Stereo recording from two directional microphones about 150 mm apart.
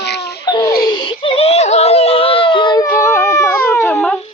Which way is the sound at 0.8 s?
30° left (ahead or behind).